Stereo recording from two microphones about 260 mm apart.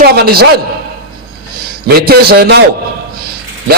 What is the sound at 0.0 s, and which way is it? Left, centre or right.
Speech, right.